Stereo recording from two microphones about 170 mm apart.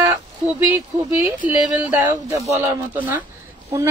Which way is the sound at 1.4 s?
10° right (ahead or behind).